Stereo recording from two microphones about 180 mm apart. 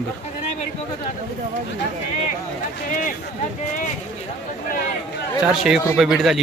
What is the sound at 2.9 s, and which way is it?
Speech, 50° left (ahead or behind).